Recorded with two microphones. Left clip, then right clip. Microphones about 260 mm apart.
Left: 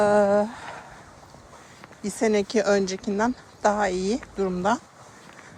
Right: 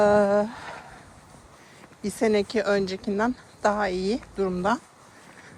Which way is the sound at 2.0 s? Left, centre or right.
Centre.